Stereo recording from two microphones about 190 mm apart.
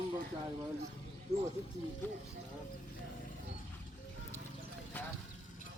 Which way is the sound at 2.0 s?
10° left (ahead or behind).